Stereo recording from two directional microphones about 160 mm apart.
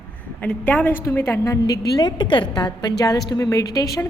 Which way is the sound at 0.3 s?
10° left (ahead or behind).